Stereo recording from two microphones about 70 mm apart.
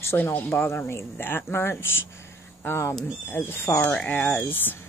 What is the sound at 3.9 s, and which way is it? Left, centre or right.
Speech, left.